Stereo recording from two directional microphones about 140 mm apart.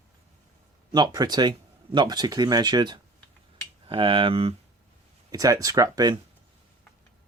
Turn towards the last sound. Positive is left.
turn(degrees=-25)  # may be behind; listen again after turning